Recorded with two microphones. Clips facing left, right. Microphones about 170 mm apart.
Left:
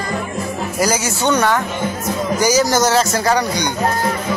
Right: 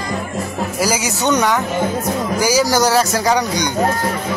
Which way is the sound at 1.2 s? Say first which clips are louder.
Even; 15° right (ahead or behind).